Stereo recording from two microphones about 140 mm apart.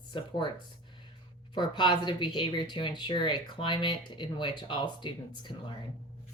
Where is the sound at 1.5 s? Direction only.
35° left (ahead or behind).